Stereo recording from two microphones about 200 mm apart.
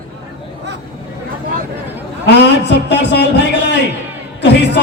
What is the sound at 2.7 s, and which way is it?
Speech, 60° left (ahead or behind).